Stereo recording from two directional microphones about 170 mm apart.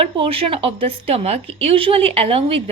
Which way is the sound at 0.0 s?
35° right (ahead or behind).